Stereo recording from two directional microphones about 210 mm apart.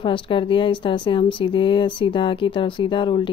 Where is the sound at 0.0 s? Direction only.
25° left (ahead or behind).